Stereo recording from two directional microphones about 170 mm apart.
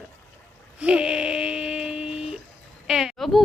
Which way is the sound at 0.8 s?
5° right (ahead or behind).